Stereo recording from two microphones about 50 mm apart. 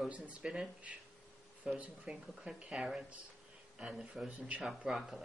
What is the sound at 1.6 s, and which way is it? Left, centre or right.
Speech, right.